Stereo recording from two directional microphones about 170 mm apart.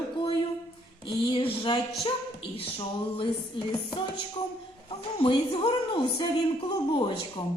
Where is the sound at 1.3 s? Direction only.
30° left (ahead or behind).